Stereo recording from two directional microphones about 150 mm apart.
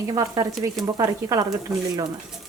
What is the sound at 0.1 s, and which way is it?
Speech, 25° right (ahead or behind).